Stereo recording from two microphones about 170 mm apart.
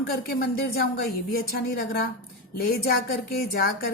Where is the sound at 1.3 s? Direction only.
60° left (ahead or behind).